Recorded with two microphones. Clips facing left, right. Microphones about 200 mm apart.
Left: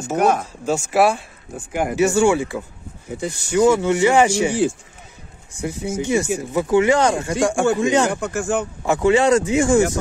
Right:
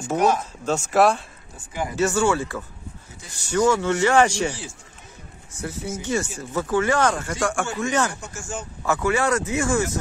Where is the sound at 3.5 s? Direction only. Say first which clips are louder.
Left 4 dB; 15° left (ahead or behind).